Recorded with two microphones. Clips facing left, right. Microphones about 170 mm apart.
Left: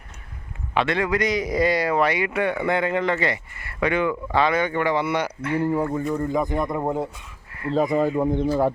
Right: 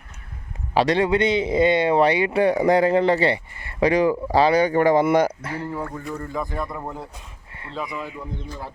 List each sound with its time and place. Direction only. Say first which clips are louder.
0.7 s speech: right 4 dB; 35° right (ahead or behind)
5.5 s speech: left 7 dB; 15° left (ahead or behind)
7.7 s speech: left 11 dB; 45° left (ahead or behind)